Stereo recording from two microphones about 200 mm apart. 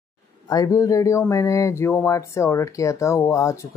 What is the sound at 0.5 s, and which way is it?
Speech, 15° left (ahead or behind).